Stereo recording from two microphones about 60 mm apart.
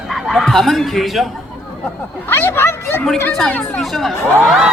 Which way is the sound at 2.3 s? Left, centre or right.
Left.